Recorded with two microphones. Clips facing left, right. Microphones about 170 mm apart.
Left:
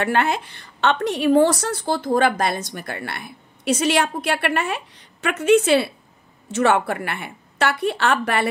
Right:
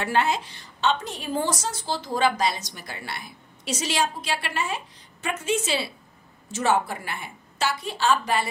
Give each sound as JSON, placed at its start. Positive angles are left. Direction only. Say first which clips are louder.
{"t": 0.0, "sound": "a woman's voice", "louder": "left 3 dB", "side_deg": 60}